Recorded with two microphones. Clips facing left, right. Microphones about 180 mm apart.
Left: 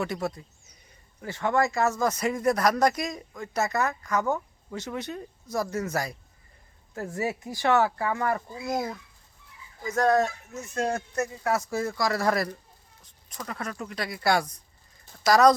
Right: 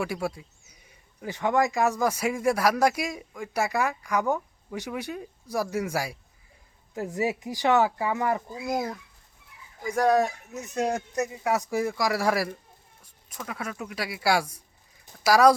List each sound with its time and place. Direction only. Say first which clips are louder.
0.0 s speech: even; 10° right (ahead or behind)
9.8 s speech: right 1 dB; 15° right (ahead or behind)